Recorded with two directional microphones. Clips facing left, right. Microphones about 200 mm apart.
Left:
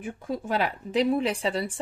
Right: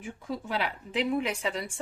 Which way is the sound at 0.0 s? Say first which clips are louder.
Left 4 dB; 50° left (ahead or behind).